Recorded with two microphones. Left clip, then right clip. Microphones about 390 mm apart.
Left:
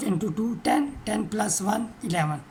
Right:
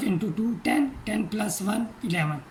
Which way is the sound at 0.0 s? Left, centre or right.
Centre.